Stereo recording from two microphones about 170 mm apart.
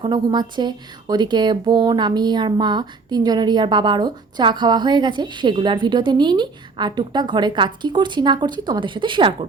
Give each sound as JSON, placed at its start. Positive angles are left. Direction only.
{"t": 0.0, "sound": "speech", "side_deg": -25}